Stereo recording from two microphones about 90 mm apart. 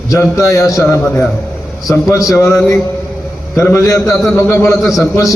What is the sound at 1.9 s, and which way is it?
A man's voice, 40° left (ahead or behind).